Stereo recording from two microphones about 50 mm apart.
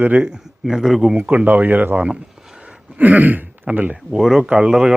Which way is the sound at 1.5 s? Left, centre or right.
Right.